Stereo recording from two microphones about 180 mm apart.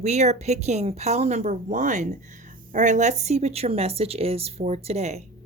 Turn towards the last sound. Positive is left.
turn(degrees=-35)  # may be behind; listen again after turning